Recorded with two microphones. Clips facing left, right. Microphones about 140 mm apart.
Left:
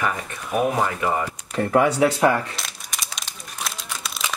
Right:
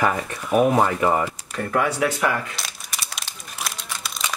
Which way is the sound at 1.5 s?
25° left (ahead or behind).